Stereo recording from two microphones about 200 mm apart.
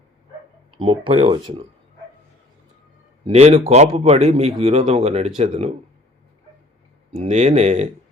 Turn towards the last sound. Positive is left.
turn(degrees=-30)  # may be behind; listen again after turning